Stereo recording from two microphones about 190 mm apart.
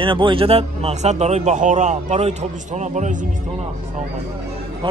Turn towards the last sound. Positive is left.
turn(degrees=-40)  # may be behind; listen again after turning